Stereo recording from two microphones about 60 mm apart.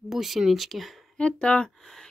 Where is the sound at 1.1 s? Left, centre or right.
Centre.